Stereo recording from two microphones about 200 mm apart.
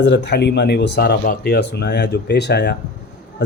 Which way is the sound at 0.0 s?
60° left (ahead or behind).